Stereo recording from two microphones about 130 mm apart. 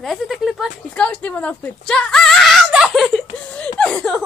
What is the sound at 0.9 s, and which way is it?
Speech, 10° left (ahead or behind).